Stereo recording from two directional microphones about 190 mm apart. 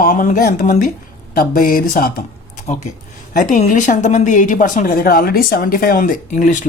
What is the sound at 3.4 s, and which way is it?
Speech, 40° left (ahead or behind).